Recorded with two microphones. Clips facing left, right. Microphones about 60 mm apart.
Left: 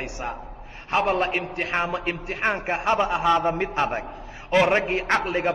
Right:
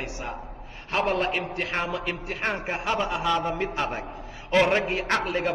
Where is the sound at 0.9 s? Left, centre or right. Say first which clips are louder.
Left 3 dB; left.